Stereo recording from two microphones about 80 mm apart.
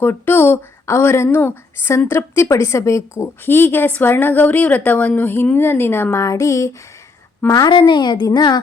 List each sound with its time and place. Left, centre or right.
0.0 s a woman's voice: left
3.4 s a woman's voice: left
7.7 s a woman's voice: left